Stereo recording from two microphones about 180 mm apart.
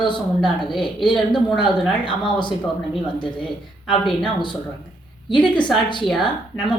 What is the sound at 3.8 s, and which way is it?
Speech, centre (ahead or behind).